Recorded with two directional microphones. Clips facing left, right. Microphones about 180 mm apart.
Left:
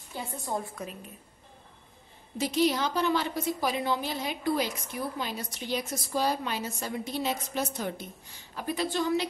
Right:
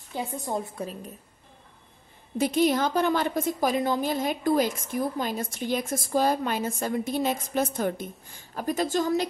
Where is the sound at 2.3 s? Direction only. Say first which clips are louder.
Right 4 dB; 55° right (ahead or behind).